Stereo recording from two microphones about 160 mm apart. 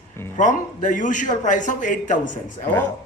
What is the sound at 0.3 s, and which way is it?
Speech, 50° left (ahead or behind).